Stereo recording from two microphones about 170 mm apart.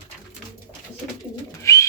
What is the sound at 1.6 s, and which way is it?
Bird, 15° left (ahead or behind).